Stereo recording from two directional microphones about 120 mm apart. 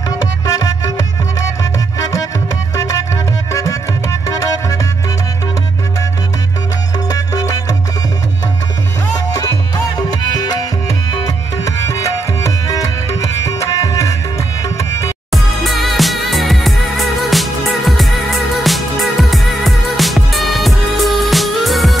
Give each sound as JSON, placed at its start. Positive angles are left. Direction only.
{"t": 0.2, "sound": "music", "side_deg": 30}
{"t": 7.1, "sound": "music", "side_deg": 30}
{"t": 9.1, "sound": "music", "side_deg": 30}
{"t": 11.2, "sound": "tabla", "side_deg": 25}
{"t": 14.6, "sound": "music", "side_deg": 25}
{"t": 15.3, "sound": "music", "side_deg": 0}